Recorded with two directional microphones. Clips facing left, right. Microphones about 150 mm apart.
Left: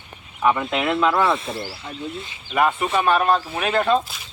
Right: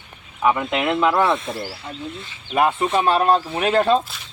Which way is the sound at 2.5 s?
25° right (ahead or behind).